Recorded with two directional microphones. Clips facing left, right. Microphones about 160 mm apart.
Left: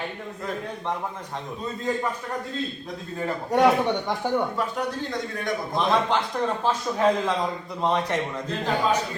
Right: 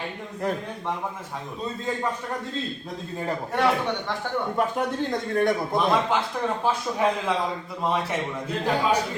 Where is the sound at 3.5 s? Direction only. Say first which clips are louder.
Left 5 dB; 15° left (ahead or behind).